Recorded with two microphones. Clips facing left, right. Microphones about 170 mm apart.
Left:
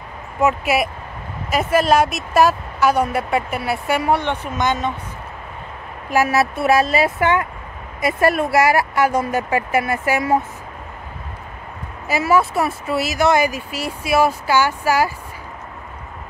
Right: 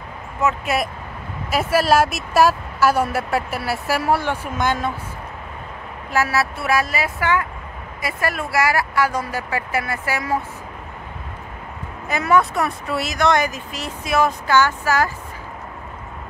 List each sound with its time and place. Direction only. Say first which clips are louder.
1.5 s a woman's voice: left 1 dB; 5° right (ahead or behind)
6.0 s speech: left 4 dB; 15° left (ahead or behind)
12.1 s speech: left 1 dB; 5° left (ahead or behind)